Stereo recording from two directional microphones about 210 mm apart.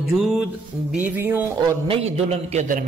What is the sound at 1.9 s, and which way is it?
Speech, 30° right (ahead or behind).